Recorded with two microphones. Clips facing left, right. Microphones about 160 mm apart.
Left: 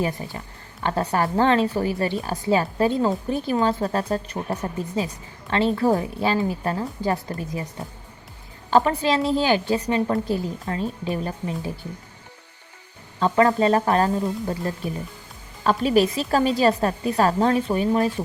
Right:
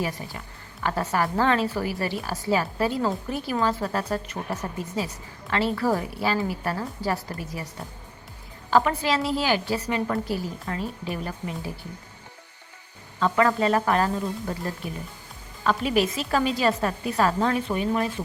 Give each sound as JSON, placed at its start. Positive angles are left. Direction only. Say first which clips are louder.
{"t": 0.0, "sound": "a woman's voice", "louder": "left 4 dB", "side_deg": 30}
{"t": 8.7, "sound": "a woman's voice", "louder": "left 3 dB", "side_deg": 30}
{"t": 13.1, "sound": "a woman's voice", "louder": "left 3 dB", "side_deg": 30}